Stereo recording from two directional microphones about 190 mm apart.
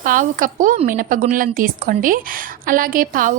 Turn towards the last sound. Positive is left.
turn(degrees=-45)  # may be behind; listen again after turning